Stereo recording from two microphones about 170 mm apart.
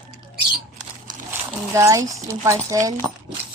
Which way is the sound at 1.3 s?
15° right (ahead or behind).